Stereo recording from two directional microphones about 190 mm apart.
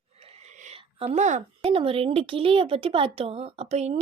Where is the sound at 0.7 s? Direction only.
35° right (ahead or behind).